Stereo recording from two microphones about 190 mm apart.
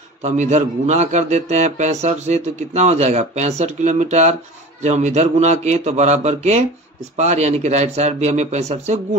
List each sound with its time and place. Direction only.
0.2 s a man's voice: 40° right (ahead or behind)